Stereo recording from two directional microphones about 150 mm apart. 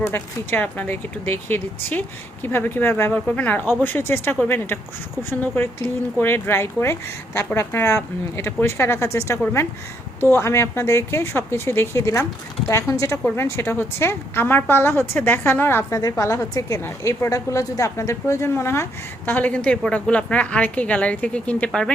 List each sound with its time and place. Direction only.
0.0 s a woman's voice: 15° left (ahead or behind)